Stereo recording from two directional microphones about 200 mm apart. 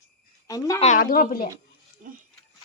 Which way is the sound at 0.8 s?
40° left (ahead or behind).